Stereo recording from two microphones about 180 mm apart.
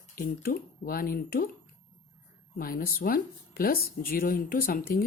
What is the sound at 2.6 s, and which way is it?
Speech, 55° left (ahead or behind).